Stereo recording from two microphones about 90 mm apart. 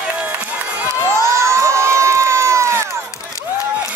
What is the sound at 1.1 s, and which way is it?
Crowd, 30° right (ahead or behind).